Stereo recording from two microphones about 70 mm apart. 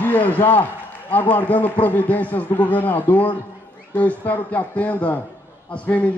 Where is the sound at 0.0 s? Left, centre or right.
Left.